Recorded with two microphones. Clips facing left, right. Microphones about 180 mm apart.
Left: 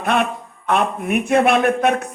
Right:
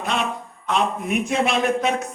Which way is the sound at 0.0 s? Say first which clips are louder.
Left 5 dB; 60° left (ahead or behind).